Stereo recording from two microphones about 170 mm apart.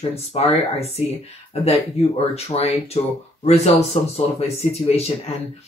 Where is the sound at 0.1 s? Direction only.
35° left (ahead or behind).